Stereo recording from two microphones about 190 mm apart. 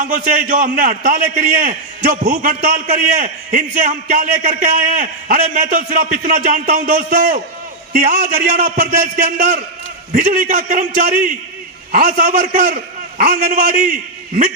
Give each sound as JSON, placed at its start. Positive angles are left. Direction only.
{"t": 0.0, "sound": "a man's voice", "side_deg": -45}